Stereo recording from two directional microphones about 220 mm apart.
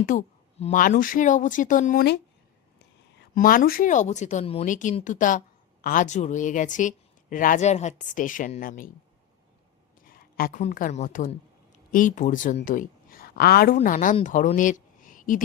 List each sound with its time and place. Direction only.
0.0 s a woman's voice: 35° left (ahead or behind)
3.3 s a woman's voice: 40° left (ahead or behind)
10.0 s a woman's voice: 40° left (ahead or behind)